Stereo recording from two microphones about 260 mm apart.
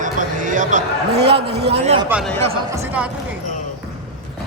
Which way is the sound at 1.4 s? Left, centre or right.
Right.